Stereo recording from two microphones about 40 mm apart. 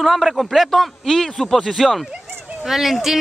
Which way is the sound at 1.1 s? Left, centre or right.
Centre.